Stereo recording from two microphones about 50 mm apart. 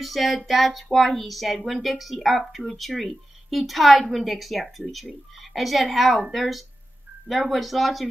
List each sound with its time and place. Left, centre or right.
0.0 s a woman's voice: centre